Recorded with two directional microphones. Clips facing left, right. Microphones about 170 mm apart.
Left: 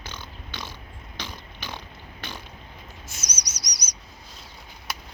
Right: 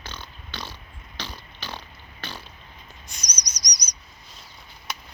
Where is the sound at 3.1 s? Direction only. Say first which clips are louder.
Left 2 dB; 5° left (ahead or behind).